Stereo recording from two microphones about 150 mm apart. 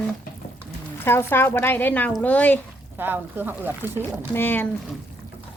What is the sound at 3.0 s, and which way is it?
Speech, 10° right (ahead or behind).